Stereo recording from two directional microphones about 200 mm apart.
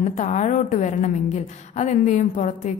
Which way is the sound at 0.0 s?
35° left (ahead or behind).